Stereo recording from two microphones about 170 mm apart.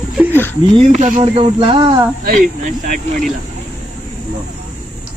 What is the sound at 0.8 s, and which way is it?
Speech, 45° right (ahead or behind).